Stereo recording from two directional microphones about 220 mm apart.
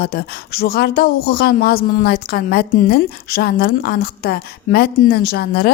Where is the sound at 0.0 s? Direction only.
45° left (ahead or behind).